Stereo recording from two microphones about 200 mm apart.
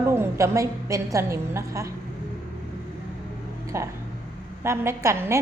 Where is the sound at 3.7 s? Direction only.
15° right (ahead or behind).